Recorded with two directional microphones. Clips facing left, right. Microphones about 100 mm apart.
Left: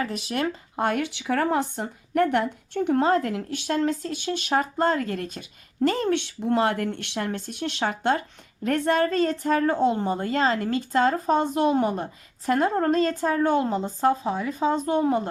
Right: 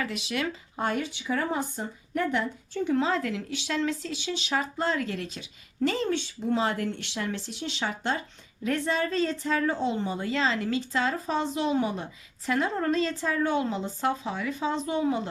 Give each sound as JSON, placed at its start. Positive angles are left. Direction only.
{"t": 0.0, "sound": "a woman's voice", "side_deg": 40}
{"t": 0.9, "sound": "a woman's voice", "side_deg": 75}
{"t": 14.8, "sound": "a woman's voice", "side_deg": 50}